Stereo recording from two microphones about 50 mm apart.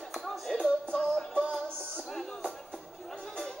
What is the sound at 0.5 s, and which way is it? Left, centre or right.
Music, left.